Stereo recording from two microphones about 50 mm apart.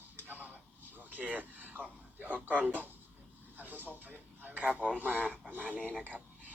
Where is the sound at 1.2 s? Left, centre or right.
Right.